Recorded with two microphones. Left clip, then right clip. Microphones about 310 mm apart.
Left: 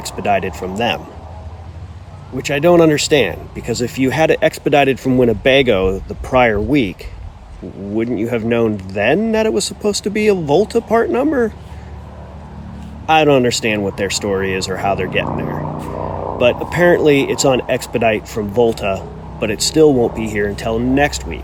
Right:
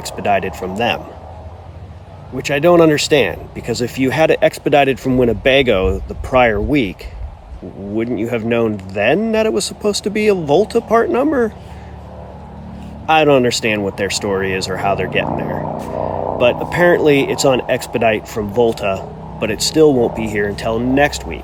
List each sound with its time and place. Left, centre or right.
0.0 s speech: centre
2.4 s speech: centre
7.9 s speech: centre
13.1 s speech: centre
15.4 s a sound: right
16.6 s speech: centre